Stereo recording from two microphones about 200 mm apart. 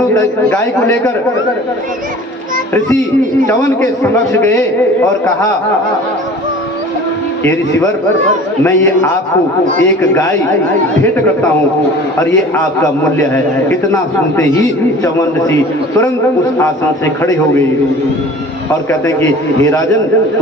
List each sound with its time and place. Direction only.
0.5 s a man's voice: 15° left (ahead or behind)
3.4 s a man's voice: 10° left (ahead or behind)
8.6 s a man's voice: 10° left (ahead or behind)
13.3 s a man's voice: 10° left (ahead or behind)
18.9 s a man's voice: 15° left (ahead or behind)